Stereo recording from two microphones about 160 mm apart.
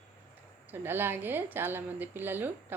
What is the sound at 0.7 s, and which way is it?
Speech, 15° right (ahead or behind).